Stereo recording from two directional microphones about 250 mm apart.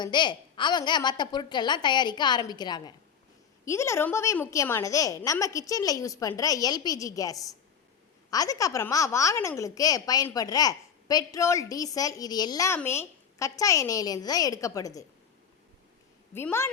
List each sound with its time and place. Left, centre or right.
0.0 s speech: centre
16.3 s speech: centre